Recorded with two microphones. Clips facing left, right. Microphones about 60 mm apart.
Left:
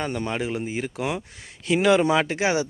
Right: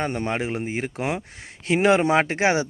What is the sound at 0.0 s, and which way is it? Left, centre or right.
Speech, right.